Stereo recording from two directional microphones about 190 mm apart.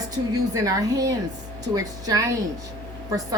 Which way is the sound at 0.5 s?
20° right (ahead or behind).